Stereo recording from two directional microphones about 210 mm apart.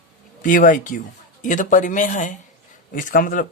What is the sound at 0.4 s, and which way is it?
Speech, 40° left (ahead or behind).